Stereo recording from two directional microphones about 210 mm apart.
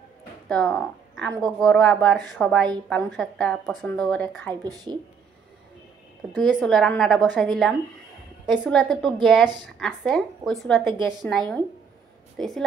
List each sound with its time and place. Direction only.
0.5 s speech: 5° left (ahead or behind)
4.6 s speech: 20° right (ahead or behind)
6.3 s speech: centre (ahead or behind)